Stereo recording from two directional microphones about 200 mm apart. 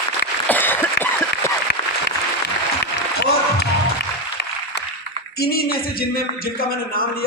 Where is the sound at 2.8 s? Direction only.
55° left (ahead or behind).